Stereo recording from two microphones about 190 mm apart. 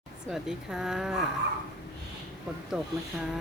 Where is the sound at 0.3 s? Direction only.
Centre (ahead or behind).